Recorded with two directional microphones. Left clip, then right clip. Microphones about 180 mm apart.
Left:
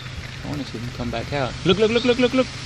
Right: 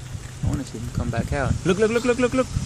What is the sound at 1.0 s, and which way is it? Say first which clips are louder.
Speech: left 1 dB; centre (ahead or behind).